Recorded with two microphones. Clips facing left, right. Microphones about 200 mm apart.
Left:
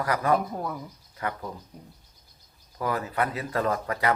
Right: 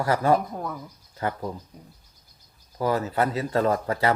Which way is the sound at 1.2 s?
30° right (ahead or behind).